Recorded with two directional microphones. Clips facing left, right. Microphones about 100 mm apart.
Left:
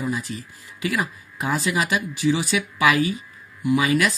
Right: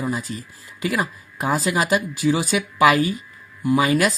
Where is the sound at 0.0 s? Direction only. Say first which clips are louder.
Right 1 dB; 35° right (ahead or behind).